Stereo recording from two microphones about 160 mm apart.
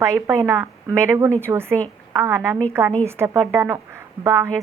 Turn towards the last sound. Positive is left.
turn(degrees=-15)  # may be behind; listen again after turning